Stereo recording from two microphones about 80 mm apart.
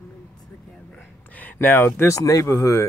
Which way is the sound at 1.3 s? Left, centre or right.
Left.